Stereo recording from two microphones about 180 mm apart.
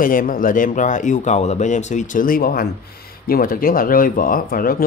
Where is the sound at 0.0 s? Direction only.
50° left (ahead or behind).